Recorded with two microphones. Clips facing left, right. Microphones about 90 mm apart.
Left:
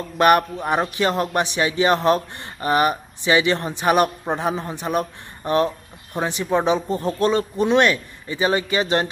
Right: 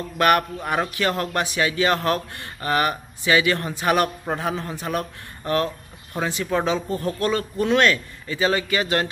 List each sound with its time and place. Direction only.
0.2 s a man's voice: 20° left (ahead or behind)